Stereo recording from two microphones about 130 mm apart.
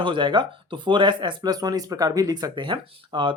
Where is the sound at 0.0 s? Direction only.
40° right (ahead or behind).